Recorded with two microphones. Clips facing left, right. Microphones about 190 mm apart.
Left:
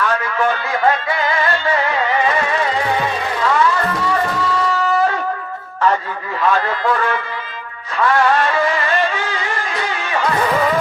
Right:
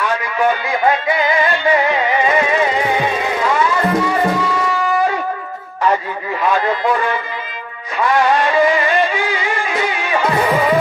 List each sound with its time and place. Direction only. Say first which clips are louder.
0.0 s music: right 1 dB; 15° right (ahead or behind)
6.4 s a sound: right 1 dB; 15° right (ahead or behind)
8.0 s music: right 1 dB; 15° right (ahead or behind)